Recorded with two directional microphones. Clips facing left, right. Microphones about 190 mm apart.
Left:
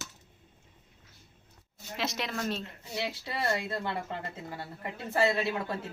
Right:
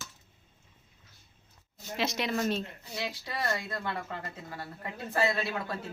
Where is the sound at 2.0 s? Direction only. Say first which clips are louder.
Right 3 dB; centre (ahead or behind).